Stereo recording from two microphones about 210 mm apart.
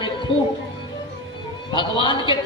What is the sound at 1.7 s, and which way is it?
Speech, 20° left (ahead or behind).